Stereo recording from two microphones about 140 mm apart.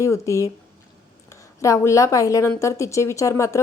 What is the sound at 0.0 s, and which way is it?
Speech, 20° left (ahead or behind).